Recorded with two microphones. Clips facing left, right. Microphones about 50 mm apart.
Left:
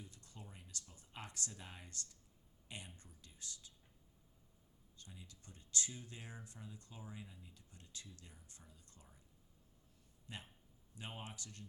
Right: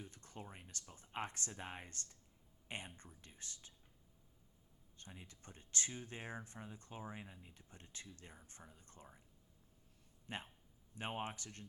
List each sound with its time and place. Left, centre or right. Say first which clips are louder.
0.0 s speech: right 5 dB; right
4.9 s speech: right 3 dB; right
10.2 s speech: right 5 dB; right